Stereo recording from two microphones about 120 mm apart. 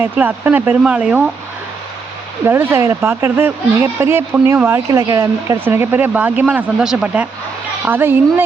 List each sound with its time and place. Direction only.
0.0 s speech: 15° right (ahead or behind)
2.4 s a woman's voice: 20° right (ahead or behind)